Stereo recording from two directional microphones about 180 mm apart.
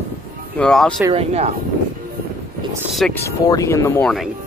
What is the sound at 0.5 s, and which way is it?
Speech, 5° left (ahead or behind).